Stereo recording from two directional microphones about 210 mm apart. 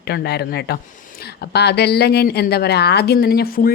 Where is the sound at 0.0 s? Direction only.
50° left (ahead or behind).